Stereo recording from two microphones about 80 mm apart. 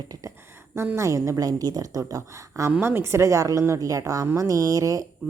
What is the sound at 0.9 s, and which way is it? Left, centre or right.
A woman's voice, right.